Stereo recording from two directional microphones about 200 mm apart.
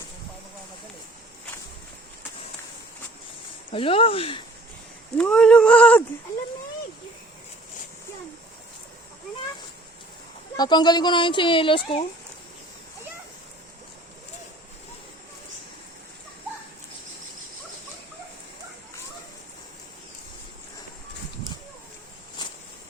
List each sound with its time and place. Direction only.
3.7 s speech: 25° left (ahead or behind)
5.1 s speech: 5° left (ahead or behind)
10.6 s speech: 20° left (ahead or behind)